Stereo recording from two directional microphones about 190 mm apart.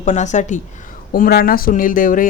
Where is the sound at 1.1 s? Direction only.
50° left (ahead or behind).